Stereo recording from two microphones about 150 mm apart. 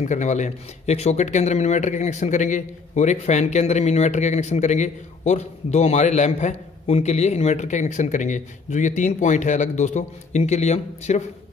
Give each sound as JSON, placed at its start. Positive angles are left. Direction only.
{"t": 0.0, "sound": "speech", "side_deg": 55}